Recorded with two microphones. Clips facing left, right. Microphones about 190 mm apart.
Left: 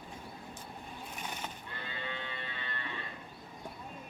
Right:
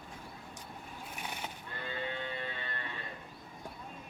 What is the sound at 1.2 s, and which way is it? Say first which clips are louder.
Neigh: even; 10° right (ahead or behind).